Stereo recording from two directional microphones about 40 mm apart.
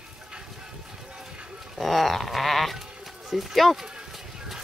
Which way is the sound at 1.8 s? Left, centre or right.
Centre.